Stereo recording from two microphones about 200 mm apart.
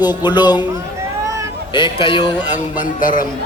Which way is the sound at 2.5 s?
40° left (ahead or behind).